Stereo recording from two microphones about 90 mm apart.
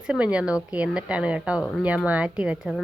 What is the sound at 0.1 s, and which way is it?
A woman's voice, 10° right (ahead or behind).